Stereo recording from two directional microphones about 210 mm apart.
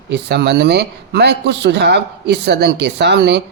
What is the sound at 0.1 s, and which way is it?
Speech, 55° right (ahead or behind).